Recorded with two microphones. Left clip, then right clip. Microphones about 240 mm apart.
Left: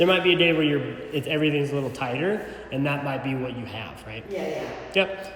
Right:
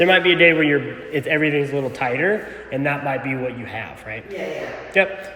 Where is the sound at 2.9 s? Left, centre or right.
Centre.